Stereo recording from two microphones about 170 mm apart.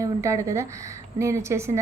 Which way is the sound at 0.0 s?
15° right (ahead or behind).